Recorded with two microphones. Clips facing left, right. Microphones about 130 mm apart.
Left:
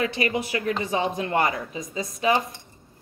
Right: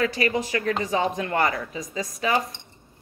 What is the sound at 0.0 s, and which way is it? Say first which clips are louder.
A woman's voice: right 1 dB; 20° left (ahead or behind).